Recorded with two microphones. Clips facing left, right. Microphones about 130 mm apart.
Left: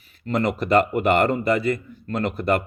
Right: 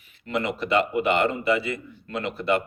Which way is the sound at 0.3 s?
40° left (ahead or behind).